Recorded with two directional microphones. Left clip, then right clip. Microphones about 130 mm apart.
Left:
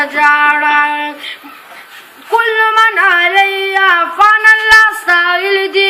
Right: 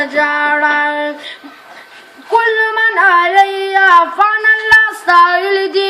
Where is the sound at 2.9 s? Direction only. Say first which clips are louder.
Even; 15° right (ahead or behind).